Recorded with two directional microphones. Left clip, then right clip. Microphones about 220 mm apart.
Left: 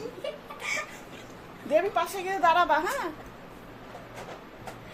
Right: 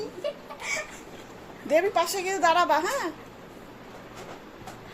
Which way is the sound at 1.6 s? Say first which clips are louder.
Right 2 dB; 15° right (ahead or behind).